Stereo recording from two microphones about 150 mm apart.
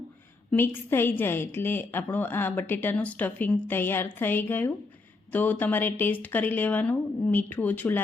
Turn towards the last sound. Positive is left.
turn(degrees=10)  # may be behind; listen again after turning